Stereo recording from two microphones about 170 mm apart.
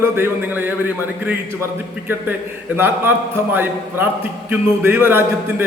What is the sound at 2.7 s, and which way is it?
A man's voice, 15° right (ahead or behind).